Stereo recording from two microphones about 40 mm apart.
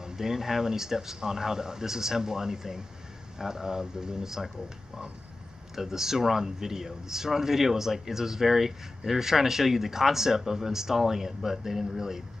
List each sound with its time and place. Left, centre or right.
0.0 s speech: centre
5.8 s speech: centre